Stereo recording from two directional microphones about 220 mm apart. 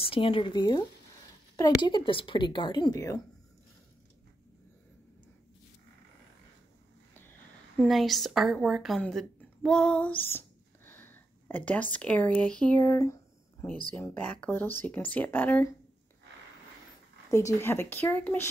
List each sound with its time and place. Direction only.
0.0 s speech: 25° left (ahead or behind)
7.8 s a woman's voice: centre (ahead or behind)
12.8 s a sound: 15° left (ahead or behind)
13.9 s speech: 10° left (ahead or behind)
17.6 s speech: 10° left (ahead or behind)